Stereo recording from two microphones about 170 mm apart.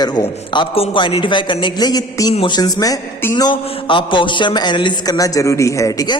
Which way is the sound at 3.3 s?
30° left (ahead or behind).